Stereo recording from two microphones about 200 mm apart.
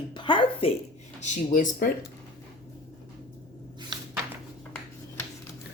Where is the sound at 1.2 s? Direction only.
35° left (ahead or behind).